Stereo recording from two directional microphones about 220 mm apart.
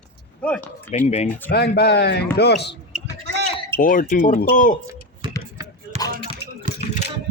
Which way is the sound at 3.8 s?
40° left (ahead or behind).